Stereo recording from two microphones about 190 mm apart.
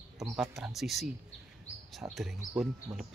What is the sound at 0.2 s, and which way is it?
Speech, centre (ahead or behind).